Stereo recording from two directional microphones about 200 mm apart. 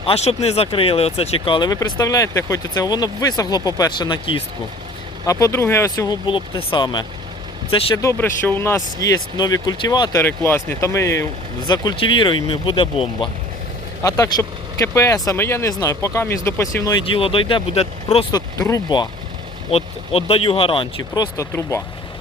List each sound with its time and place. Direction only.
0.0 s speech: 30° left (ahead or behind)
8.0 s speech: 10° left (ahead or behind)
17.1 s speech: 25° left (ahead or behind)